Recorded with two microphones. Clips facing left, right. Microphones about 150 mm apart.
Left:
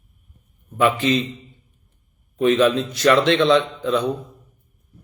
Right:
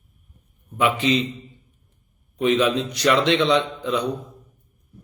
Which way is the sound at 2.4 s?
20° right (ahead or behind).